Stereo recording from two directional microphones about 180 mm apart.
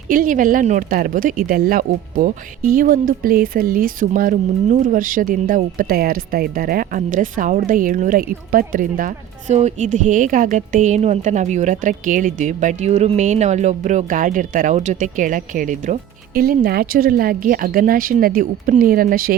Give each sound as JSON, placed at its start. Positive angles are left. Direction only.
{"t": 0.1, "sound": "a woman's voice", "side_deg": -50}